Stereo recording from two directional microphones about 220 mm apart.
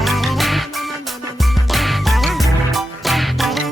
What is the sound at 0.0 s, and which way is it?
Music, centre (ahead or behind).